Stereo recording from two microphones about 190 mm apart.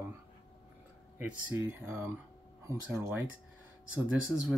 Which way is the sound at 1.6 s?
15° right (ahead or behind).